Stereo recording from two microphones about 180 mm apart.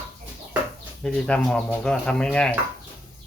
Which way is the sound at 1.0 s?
5° left (ahead or behind).